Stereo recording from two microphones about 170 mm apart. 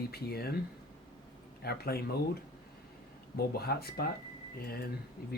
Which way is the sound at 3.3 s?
65° left (ahead or behind).